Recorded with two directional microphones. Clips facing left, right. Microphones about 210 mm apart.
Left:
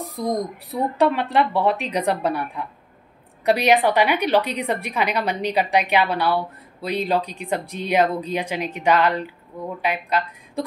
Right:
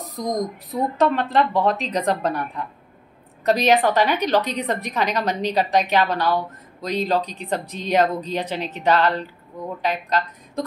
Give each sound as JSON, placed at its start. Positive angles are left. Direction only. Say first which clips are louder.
{"t": 0.2, "sound": "speech", "louder": "even", "side_deg": 10}